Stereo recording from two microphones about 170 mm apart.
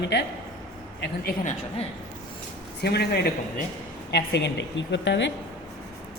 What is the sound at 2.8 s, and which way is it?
Speech, 80° left.